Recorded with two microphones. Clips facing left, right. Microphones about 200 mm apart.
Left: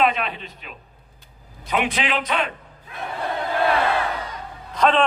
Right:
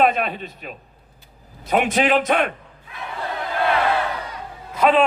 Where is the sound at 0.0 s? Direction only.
45° right (ahead or behind).